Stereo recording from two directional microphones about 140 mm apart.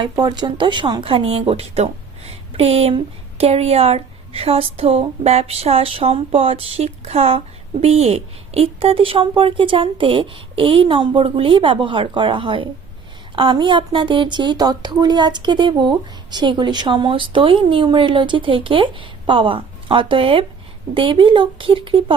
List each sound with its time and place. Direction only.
0.0 s speech: 30° right (ahead or behind)